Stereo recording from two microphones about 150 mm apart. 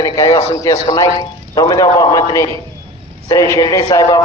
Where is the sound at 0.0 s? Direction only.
25° left (ahead or behind).